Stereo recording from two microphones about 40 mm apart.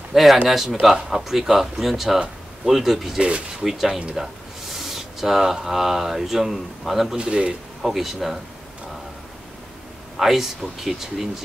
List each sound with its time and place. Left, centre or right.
0.1 s a man's voice: centre
3.2 s speech: right
3.6 s a man's voice: centre
7.2 s speech: right
7.8 s speech: centre
10.1 s speech: centre